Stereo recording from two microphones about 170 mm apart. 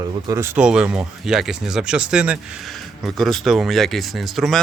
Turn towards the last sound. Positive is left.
turn(degrees=0)  # may be behind; listen again after turning